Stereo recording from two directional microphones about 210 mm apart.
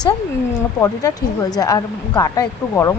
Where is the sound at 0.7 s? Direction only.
15° left (ahead or behind).